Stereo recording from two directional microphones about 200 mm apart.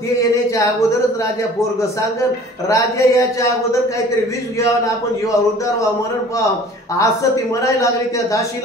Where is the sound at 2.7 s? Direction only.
15° left (ahead or behind).